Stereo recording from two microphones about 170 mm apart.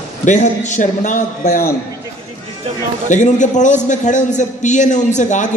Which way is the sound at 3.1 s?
45° left (ahead or behind).